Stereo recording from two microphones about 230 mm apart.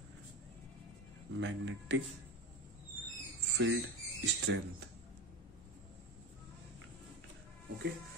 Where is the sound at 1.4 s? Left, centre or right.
Right.